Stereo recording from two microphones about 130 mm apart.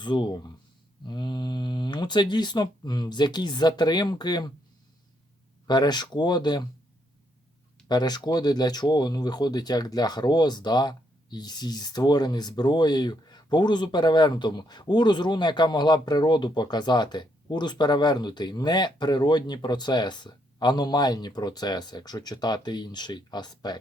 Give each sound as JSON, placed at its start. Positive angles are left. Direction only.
{"t": 0.0, "sound": "speech", "side_deg": 35}
{"t": 5.6, "sound": "speech", "side_deg": 35}
{"t": 7.9, "sound": "speech", "side_deg": 30}